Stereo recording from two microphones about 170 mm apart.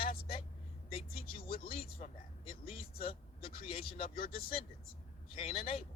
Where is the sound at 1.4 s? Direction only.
60° left (ahead or behind).